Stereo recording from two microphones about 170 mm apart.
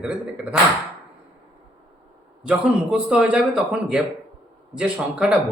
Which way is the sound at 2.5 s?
5° right (ahead or behind).